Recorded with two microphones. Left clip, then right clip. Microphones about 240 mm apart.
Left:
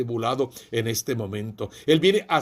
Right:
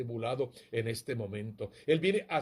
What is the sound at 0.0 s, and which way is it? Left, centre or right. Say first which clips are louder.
Speech: left 9 dB; left.